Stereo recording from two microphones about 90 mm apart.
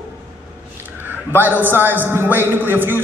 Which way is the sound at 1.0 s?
20° right (ahead or behind).